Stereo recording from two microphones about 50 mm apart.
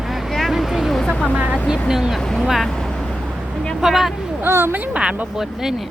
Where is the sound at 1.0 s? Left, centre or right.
Centre.